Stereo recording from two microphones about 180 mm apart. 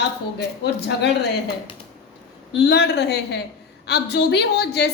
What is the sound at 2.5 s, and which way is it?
A woman's voice, 70° left (ahead or behind).